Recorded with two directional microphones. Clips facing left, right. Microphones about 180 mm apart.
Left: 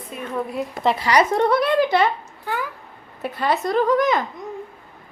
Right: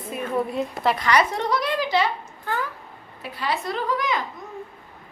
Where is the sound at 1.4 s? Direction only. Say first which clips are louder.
Left 7 dB; 55° left (ahead or behind).